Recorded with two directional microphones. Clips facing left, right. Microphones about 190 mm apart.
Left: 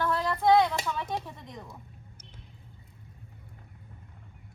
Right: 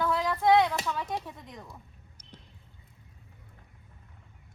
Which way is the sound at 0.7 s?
10° left (ahead or behind).